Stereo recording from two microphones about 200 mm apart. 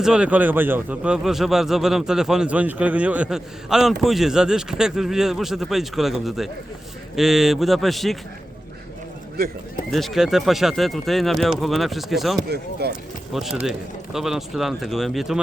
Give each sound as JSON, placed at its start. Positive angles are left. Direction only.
{"t": 0.0, "sound": "a man's voice", "side_deg": -5}
{"t": 9.9, "sound": "a man's voice", "side_deg": 0}
{"t": 12.8, "sound": "speech", "side_deg": -55}
{"t": 13.3, "sound": "a man's voice", "side_deg": 0}